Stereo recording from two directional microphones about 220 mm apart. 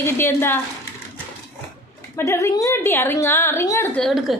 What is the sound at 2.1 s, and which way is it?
A woman's voice, 10° left (ahead or behind).